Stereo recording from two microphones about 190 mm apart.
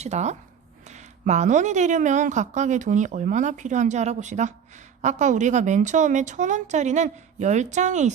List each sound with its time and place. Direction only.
0.0 s a woman's voice: 35° right (ahead or behind)